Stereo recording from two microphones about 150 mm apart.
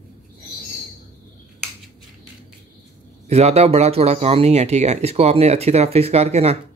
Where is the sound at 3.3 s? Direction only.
45° right (ahead or behind).